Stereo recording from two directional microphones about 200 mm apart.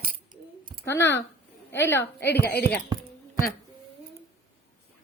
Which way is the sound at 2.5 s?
50° left (ahead or behind).